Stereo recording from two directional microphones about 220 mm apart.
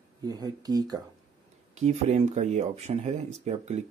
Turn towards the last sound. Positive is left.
turn(degrees=-30)  # may be behind; listen again after turning